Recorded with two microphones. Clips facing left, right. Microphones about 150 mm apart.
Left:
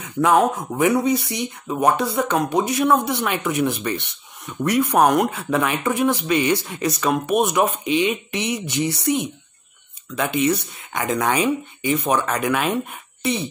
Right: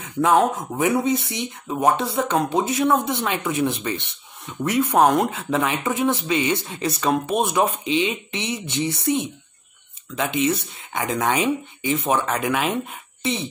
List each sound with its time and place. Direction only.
0.4 s speech: 25° right (ahead or behind)